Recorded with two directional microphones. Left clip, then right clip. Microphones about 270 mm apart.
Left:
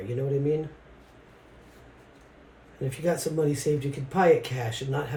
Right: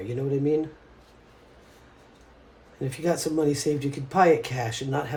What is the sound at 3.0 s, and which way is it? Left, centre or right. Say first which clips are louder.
Speech: right 2 dB; right.